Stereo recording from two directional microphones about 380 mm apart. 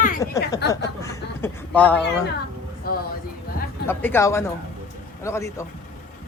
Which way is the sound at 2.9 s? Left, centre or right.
Left.